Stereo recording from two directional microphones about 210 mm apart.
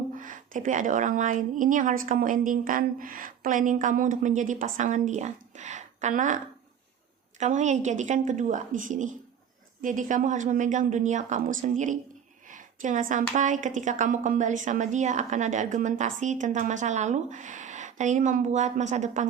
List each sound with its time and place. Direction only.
0.2 s a woman's voice: 40° right (ahead or behind)